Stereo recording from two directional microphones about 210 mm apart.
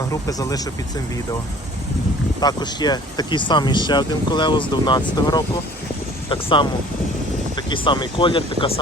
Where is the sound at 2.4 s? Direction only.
20° left (ahead or behind).